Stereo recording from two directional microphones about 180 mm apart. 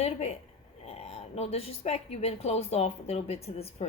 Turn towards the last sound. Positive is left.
turn(degrees=35)  # may be behind; listen again after turning